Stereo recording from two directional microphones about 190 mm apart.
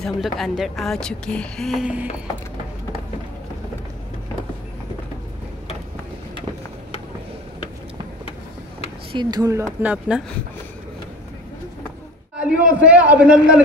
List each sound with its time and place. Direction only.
0.0 s a woman's voice: centre (ahead or behind)
9.1 s a man's voice: 20° right (ahead or behind); by 10.2 s 5° right (ahead or behind)
12.4 s a man's voice: 5° right (ahead or behind)